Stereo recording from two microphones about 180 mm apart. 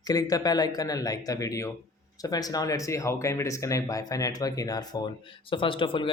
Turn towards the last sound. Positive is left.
turn(degrees=30)  # may be behind; listen again after turning